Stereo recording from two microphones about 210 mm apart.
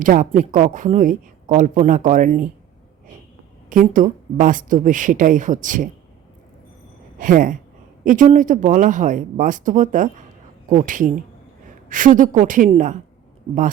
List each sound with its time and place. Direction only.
0.0 s speech: 40° right (ahead or behind)
3.7 s speech: 40° right (ahead or behind)
7.2 s speech: 40° right (ahead or behind)